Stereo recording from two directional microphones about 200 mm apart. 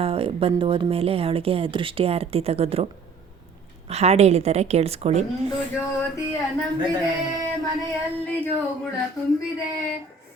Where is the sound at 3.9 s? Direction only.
30° right (ahead or behind).